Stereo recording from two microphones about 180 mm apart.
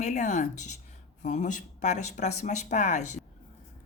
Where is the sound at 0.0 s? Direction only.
45° left (ahead or behind).